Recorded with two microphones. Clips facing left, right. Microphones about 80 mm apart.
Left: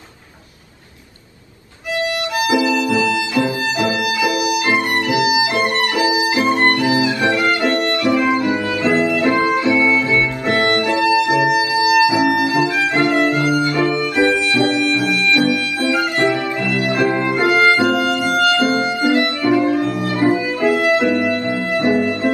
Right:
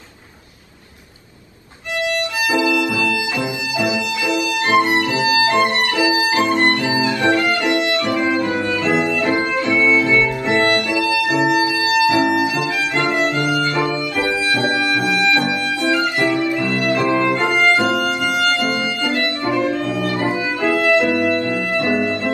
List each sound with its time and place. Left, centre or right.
3.7 s violin: left
6.1 s music: left
8.4 s music: left
13.5 s music: right
16.0 s music: left
18.5 s music: right
19.5 s music: left